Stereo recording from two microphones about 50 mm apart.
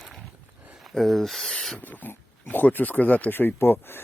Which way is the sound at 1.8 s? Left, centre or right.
Left.